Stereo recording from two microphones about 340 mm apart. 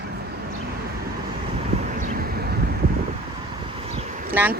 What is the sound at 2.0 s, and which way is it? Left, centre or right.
Vehicle, right.